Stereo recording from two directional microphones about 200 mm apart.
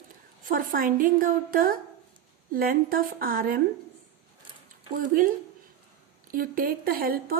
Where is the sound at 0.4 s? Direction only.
45° right (ahead or behind).